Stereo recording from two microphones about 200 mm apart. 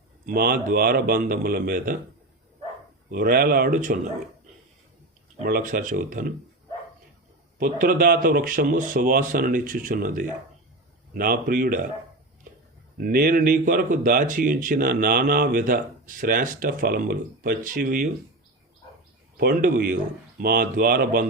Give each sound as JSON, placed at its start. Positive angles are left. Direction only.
{"t": 0.3, "sound": "speech", "side_deg": -45}
{"t": 3.1, "sound": "speech", "side_deg": -50}
{"t": 5.4, "sound": "speech", "side_deg": -45}
{"t": 7.6, "sound": "speech", "side_deg": -45}
{"t": 13.0, "sound": "speech", "side_deg": -45}
{"t": 19.4, "sound": "speech", "side_deg": -45}